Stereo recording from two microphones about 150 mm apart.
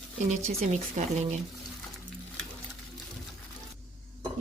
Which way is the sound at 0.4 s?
50° right (ahead or behind).